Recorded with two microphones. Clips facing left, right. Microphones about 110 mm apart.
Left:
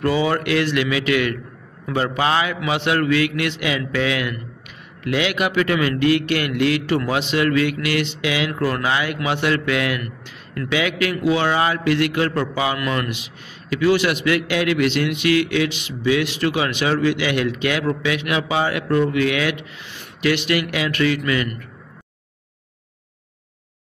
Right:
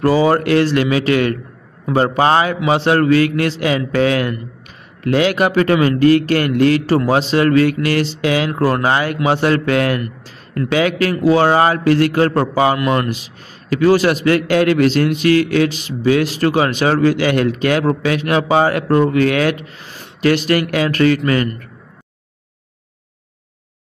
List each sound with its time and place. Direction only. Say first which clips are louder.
0.0 s a man's voice: right 6 dB; 35° right (ahead or behind)
12.7 s a man's voice: right 6 dB; 25° right (ahead or behind); by 21.2 s 45° right (ahead or behind)